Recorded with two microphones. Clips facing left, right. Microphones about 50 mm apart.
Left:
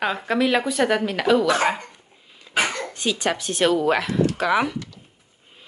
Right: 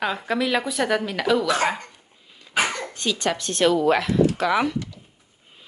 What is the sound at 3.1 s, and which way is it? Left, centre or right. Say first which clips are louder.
Speech: left 1 dB; centre.